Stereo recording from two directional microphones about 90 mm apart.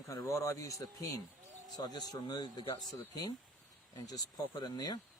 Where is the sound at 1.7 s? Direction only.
50° left (ahead or behind).